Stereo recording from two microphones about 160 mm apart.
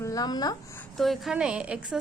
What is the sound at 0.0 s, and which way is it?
Speech, 20° left (ahead or behind).